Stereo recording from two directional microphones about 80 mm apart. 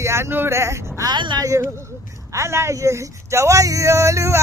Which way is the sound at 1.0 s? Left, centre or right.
Right.